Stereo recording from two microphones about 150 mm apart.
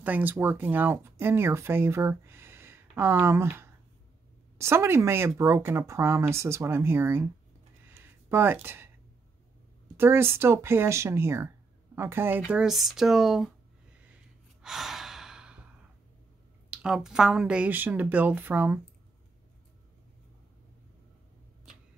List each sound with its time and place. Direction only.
0.0 s speech: 10° right (ahead or behind)
7.9 s a sound: 15° right (ahead or behind)
9.9 s speech: 15° right (ahead or behind)
14.6 s breathing: centre (ahead or behind)
16.7 s speech: 5° right (ahead or behind)